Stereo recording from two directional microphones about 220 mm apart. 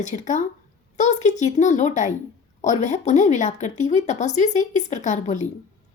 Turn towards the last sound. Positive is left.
turn(degrees=35)  # may be behind; listen again after turning